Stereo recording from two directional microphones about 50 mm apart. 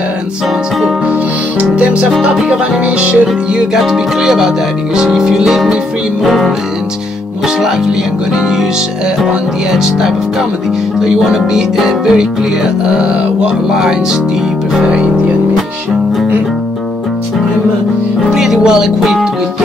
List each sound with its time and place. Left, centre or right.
1.6 s music: right
3.7 s music: centre
6.2 s speech: centre
9.7 s music: centre
18.3 s speech: centre